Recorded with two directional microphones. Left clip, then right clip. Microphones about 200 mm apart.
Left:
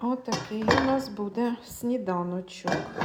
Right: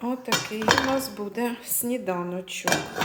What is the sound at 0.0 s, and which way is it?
Dishes, 10° left (ahead or behind).